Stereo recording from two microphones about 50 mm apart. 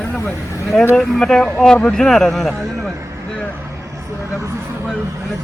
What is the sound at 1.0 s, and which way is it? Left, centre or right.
A man's voice, centre.